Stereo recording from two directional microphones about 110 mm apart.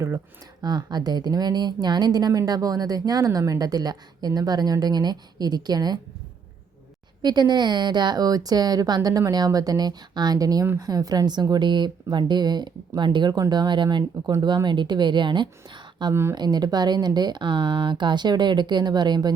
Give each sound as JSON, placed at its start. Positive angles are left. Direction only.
{"t": 0.6, "sound": "speech", "side_deg": -40}
{"t": 7.2, "sound": "a woman's voice", "side_deg": -40}